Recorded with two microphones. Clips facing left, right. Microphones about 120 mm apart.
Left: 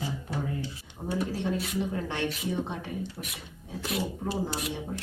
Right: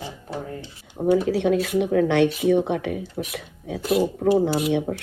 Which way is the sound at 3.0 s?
Centre (ahead or behind).